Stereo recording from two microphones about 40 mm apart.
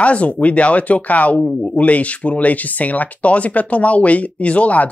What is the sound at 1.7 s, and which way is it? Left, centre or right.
Speech, left.